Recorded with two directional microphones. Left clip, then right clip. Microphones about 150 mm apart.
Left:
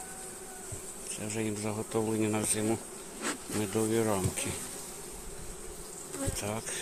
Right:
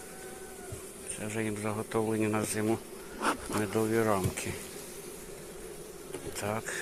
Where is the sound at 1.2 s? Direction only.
30° left (ahead or behind).